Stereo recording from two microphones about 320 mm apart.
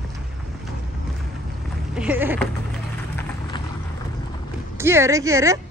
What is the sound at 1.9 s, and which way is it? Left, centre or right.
Speech, centre.